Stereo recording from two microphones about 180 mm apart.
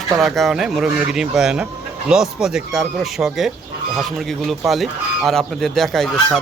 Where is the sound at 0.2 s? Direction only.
Centre (ahead or behind).